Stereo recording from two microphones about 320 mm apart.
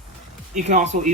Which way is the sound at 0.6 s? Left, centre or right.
Right.